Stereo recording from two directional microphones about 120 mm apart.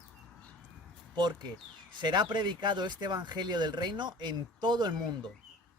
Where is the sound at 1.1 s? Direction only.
35° right (ahead or behind).